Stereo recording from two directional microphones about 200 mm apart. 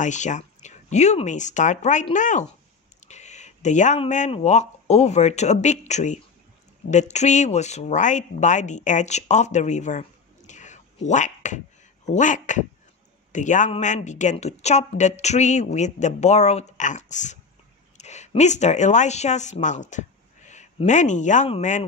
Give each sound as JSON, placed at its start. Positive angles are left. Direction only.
{"t": 0.0, "sound": "a woman's voice", "side_deg": 35}